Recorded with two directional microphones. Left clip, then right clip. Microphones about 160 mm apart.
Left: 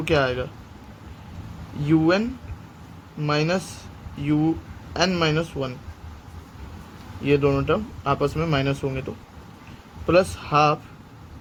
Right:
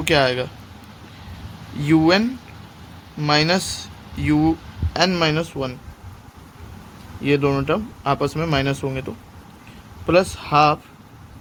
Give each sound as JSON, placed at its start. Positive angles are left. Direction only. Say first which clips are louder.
{"t": 0.0, "sound": "speech", "louder": "right 4 dB", "side_deg": -25}
{"t": 1.8, "sound": "a man's voice", "louder": "right 4 dB", "side_deg": -30}
{"t": 7.2, "sound": "a man's voice", "louder": "right 1 dB", "side_deg": -25}